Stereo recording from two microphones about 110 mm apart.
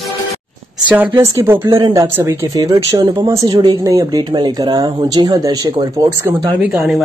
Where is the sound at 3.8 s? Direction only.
35° right (ahead or behind).